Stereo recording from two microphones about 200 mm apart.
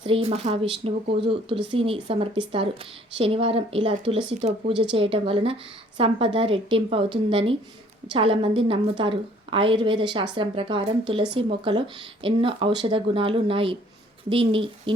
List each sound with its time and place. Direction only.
0.0 s a woman's voice: 30° right (ahead or behind)